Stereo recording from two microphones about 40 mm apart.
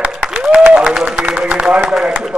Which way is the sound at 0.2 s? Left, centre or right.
Centre.